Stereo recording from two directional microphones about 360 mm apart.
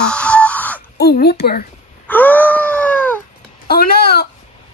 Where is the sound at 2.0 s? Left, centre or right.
Centre.